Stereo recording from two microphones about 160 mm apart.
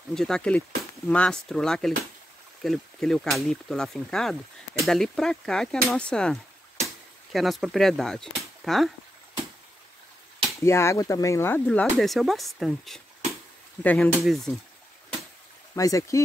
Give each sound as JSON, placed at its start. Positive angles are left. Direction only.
{"t": 0.1, "sound": "speech", "side_deg": 5}
{"t": 7.3, "sound": "speech", "side_deg": 0}
{"t": 10.6, "sound": "speech", "side_deg": 15}
{"t": 15.7, "sound": "speech", "side_deg": 20}